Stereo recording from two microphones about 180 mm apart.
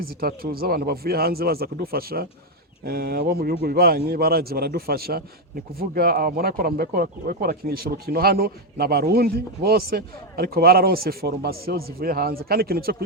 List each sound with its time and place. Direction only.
0.2 s speech: 55° right (ahead or behind)